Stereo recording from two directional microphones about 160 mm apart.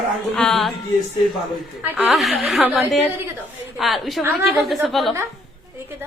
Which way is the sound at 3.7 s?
Centre (ahead or behind).